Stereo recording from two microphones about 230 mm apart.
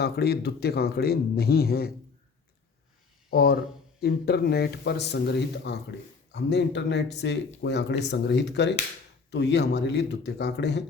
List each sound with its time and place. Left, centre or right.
0.0 s speech: left
3.2 s speech: left